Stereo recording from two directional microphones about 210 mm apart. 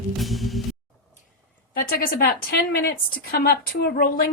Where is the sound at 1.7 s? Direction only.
45° left (ahead or behind).